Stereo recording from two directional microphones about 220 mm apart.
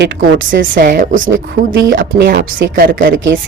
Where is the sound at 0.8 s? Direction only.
40° right (ahead or behind).